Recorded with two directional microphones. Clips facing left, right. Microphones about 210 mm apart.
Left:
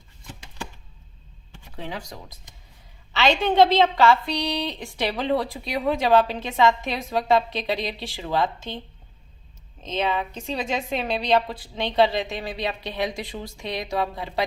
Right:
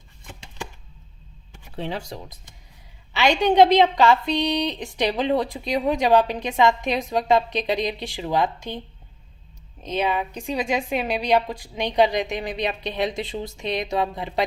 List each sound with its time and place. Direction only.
1.7 s a woman's voice: 30° right (ahead or behind)
3.1 s a woman's voice: 15° right (ahead or behind)
9.8 s a woman's voice: 10° right (ahead or behind)